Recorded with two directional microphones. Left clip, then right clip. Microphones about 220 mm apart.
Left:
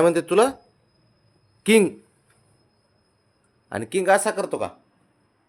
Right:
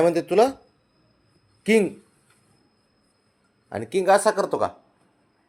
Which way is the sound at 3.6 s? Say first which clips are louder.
Even; 15° left (ahead or behind).